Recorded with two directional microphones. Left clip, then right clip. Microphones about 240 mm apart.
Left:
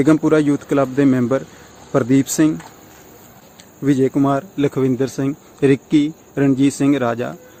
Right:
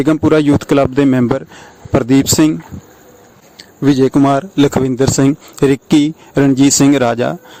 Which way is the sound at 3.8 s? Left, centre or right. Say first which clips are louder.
Right 5 dB; right.